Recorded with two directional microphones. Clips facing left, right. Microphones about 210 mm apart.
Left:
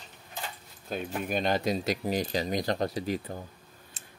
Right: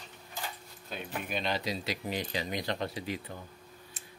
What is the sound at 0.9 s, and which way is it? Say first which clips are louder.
Speech: left 6 dB; 45° left (ahead or behind).